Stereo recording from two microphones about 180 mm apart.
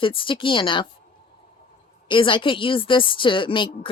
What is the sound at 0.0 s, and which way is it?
Speech, 30° left (ahead or behind).